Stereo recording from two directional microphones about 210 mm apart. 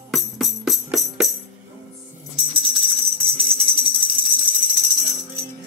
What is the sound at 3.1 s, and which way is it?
Tambourine, 25° right (ahead or behind).